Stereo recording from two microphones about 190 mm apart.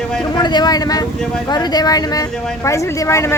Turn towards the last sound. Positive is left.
turn(degrees=15)  # may be behind; listen again after turning